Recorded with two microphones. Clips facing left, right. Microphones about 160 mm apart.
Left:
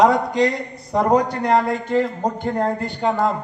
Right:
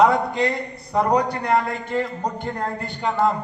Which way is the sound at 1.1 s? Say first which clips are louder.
Left 4 dB; 40° left (ahead or behind).